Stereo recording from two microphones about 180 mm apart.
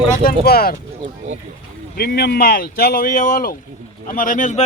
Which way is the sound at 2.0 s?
60° left (ahead or behind).